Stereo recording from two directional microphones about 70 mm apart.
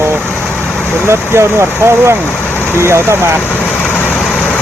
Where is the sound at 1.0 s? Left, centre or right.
Right.